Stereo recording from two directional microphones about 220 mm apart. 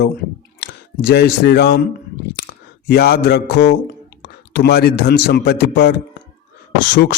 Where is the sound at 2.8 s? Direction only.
45° left (ahead or behind).